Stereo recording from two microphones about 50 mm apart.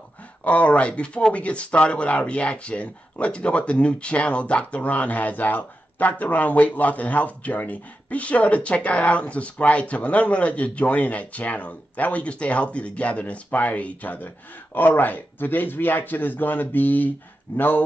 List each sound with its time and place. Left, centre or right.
0.4 s speech: left